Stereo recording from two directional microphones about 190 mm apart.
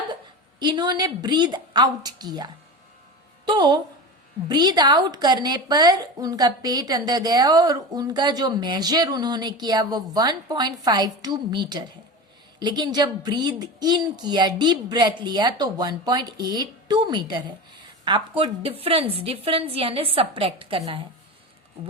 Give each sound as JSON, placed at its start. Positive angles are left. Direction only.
{"t": 0.6, "sound": "a woman's voice", "side_deg": -25}